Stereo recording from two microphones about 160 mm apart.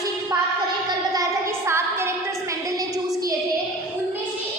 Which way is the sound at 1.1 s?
20° right (ahead or behind).